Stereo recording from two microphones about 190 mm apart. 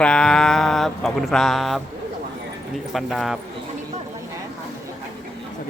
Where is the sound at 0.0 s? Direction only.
5° left (ahead or behind).